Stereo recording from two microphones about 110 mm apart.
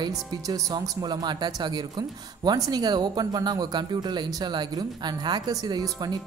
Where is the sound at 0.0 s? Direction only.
40° right (ahead or behind).